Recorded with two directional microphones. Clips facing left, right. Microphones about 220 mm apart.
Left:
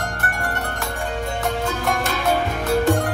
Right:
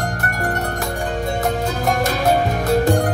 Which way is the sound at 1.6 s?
40° right (ahead or behind).